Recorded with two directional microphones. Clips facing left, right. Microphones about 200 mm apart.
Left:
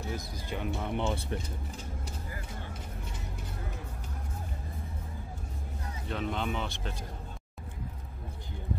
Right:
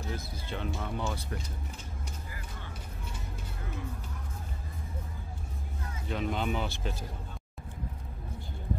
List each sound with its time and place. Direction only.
0.1 s speech: 15° left (ahead or behind)
6.0 s speech: 5° right (ahead or behind)